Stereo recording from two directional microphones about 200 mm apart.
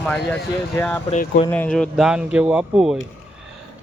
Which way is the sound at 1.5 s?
5° left (ahead or behind).